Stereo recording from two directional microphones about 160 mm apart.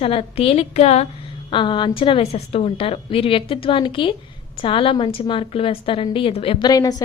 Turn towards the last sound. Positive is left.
turn(degrees=25)  # may be behind; listen again after turning